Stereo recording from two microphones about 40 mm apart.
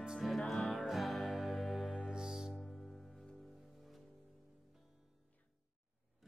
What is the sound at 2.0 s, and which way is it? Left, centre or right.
Music, centre.